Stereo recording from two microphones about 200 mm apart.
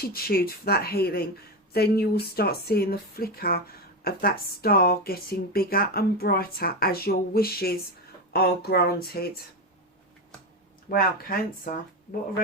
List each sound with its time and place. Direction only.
0.0 s speech: 50° left (ahead or behind)
10.8 s speech: 45° left (ahead or behind)